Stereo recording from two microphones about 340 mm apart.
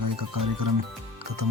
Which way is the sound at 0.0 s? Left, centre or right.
Right.